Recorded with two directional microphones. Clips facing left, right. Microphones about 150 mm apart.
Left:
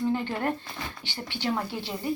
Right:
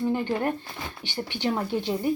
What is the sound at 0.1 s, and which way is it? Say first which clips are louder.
Speech: right 2 dB; 15° right (ahead or behind).